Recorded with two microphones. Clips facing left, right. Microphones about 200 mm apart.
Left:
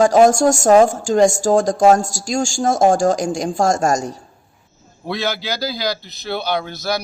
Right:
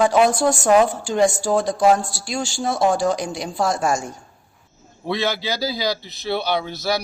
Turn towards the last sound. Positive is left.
turn(degrees=-5)  # may be behind; listen again after turning